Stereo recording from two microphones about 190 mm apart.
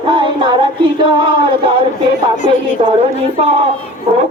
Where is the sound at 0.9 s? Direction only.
25° right (ahead or behind).